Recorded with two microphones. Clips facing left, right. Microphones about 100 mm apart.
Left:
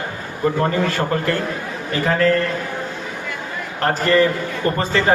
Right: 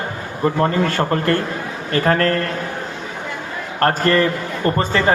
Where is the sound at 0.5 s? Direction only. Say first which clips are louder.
Right 3 dB; 35° right (ahead or behind).